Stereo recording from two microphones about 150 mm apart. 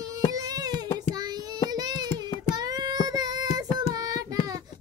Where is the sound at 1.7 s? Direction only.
25° right (ahead or behind).